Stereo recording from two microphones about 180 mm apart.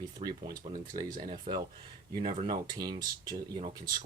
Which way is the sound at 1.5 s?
35° right (ahead or behind).